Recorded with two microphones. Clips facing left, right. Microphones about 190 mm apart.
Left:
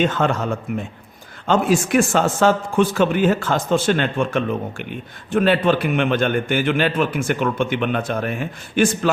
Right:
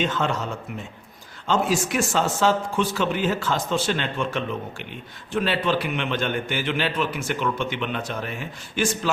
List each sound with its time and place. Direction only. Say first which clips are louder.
0.0 s a man's voice: left 5 dB; 50° left (ahead or behind)